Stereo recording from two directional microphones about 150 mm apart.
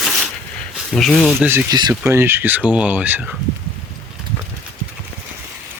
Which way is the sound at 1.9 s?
15° right (ahead or behind).